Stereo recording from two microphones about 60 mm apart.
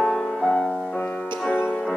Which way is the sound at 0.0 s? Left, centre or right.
Centre.